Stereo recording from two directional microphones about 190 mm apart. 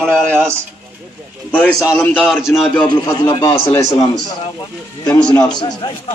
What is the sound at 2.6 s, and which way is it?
A man's voice, 15° left (ahead or behind).